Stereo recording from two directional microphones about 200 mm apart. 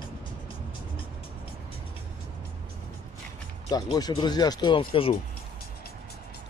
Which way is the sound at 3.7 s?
20° left (ahead or behind).